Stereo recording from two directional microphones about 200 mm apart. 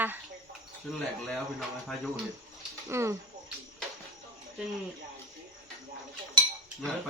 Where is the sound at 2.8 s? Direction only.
15° right (ahead or behind).